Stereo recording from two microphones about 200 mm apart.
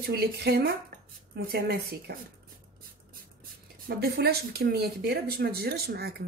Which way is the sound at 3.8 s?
55° right (ahead or behind).